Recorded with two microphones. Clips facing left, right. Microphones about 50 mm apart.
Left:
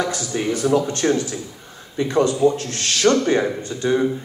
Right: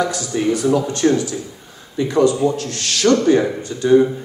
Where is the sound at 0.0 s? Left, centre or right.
Left.